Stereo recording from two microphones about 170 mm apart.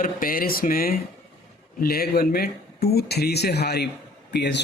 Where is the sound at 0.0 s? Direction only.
55° left (ahead or behind).